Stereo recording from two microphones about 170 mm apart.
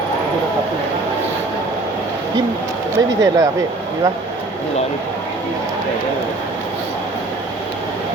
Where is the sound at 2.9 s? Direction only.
20° right (ahead or behind).